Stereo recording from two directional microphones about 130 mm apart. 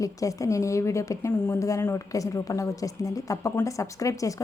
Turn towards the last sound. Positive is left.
turn(degrees=25)  # may be behind; listen again after turning